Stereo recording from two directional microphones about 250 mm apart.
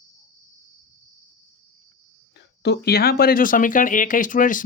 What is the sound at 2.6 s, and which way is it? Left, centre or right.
Speech, left.